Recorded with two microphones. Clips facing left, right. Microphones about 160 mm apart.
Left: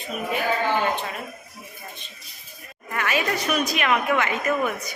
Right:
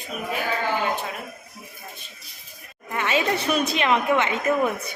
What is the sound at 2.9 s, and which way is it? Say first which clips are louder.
A woman's voice: right 2 dB; 25° right (ahead or behind).